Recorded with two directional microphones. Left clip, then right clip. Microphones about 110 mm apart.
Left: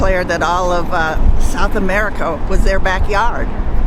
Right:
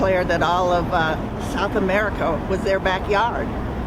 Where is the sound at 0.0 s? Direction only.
25° right (ahead or behind).